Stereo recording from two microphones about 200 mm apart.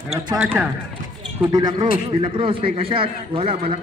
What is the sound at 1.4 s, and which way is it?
A man's voice, 20° right (ahead or behind).